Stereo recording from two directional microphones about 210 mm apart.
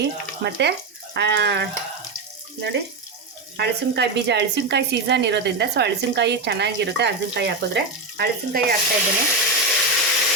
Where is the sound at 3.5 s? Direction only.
55° right (ahead or behind).